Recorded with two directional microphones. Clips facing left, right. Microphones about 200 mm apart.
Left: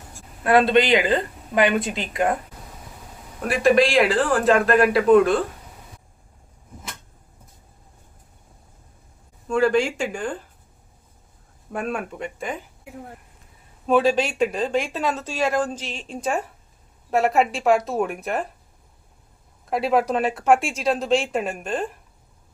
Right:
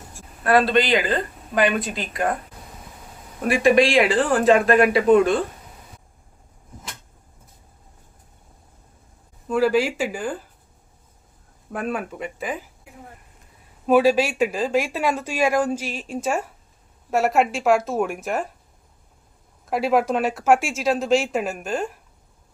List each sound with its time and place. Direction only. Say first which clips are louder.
0.4 s speech: left 1 dB; 20° left (ahead or behind)
3.4 s speech: right 1 dB; centre (ahead or behind)
9.5 s speech: even; 5° right (ahead or behind)
11.7 s speech: right 1 dB; centre (ahead or behind)
13.8 s speech: right 2 dB; 5° right (ahead or behind)
19.7 s speech: right 1 dB; centre (ahead or behind)